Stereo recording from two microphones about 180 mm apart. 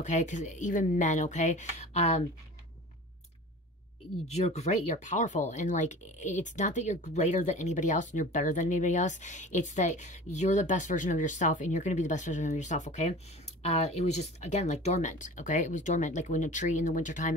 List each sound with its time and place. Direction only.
0.0 s speech: 40° left (ahead or behind)
4.4 s speech: 40° left (ahead or behind)